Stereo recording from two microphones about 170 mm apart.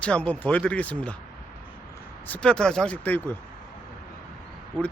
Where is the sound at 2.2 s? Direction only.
10° left (ahead or behind).